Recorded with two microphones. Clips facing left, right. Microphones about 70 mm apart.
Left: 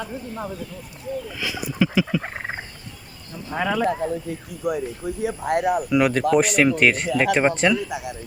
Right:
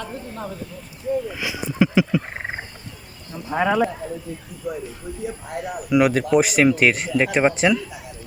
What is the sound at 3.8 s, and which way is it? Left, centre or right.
Speech, left.